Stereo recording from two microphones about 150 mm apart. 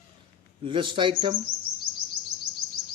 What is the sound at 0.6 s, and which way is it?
Speech, 35° right (ahead or behind).